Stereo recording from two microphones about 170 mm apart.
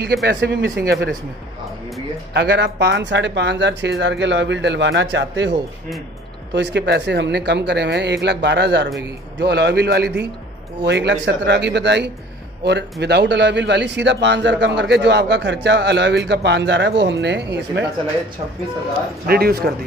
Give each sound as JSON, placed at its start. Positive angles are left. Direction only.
{"t": 0.0, "sound": "speech", "side_deg": -80}
{"t": 2.3, "sound": "speech", "side_deg": -80}
{"t": 6.5, "sound": "speech", "side_deg": -90}
{"t": 10.9, "sound": "speech", "side_deg": -90}
{"t": 19.2, "sound": "speech", "side_deg": -65}